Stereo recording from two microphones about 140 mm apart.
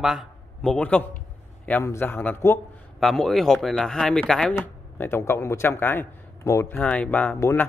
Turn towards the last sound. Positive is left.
turn(degrees=20)  # may be behind; listen again after turning